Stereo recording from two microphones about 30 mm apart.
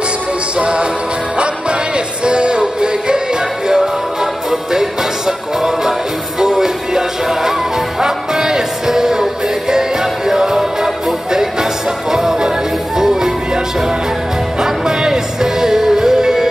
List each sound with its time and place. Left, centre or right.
0.6 s music: right
2.2 s music: right; by 13.3 s centre
14.6 s music: right